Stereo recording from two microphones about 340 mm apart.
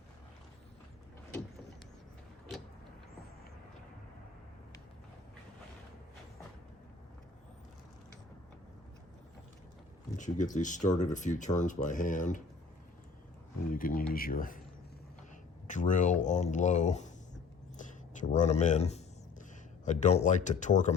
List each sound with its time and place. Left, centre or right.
10.2 s speech: left
13.7 s speech: left
15.6 s speech: left